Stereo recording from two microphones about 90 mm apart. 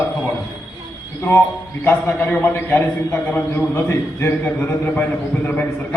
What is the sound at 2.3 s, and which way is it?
A man's voice, 20° left (ahead or behind).